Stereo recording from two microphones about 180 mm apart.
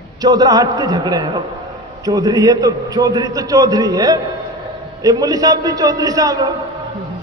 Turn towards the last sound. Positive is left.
turn(degrees=-20)  # may be behind; listen again after turning